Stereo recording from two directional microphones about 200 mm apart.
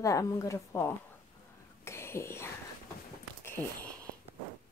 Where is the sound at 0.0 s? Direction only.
15° left (ahead or behind).